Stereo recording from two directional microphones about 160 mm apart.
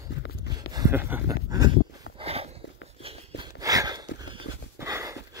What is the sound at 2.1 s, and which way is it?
Dog, 40° right (ahead or behind).